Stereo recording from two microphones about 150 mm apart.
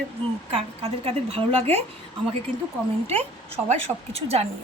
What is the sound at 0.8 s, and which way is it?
Speech, 40° right (ahead or behind).